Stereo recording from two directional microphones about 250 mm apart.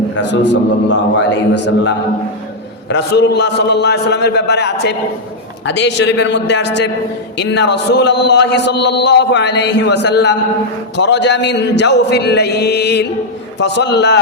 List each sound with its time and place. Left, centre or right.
0.3 s speech: left
2.9 s speech: left